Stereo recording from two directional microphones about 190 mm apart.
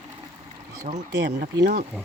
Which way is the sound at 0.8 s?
40° right (ahead or behind).